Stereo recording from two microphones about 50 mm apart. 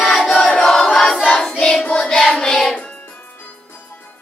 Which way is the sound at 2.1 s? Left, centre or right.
Centre.